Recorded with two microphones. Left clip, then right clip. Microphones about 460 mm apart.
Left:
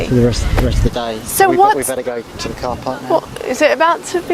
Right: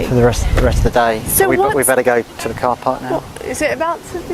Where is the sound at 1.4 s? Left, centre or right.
Left.